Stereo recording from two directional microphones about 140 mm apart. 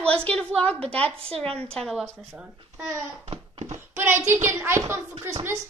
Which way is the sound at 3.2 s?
50° right (ahead or behind).